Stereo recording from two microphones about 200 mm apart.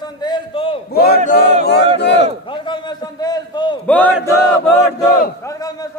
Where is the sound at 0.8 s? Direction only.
50° left (ahead or behind).